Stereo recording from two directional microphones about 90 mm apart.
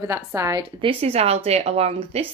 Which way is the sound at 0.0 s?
35° right (ahead or behind).